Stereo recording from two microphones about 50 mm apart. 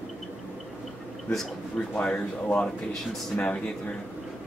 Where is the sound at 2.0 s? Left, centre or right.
Left.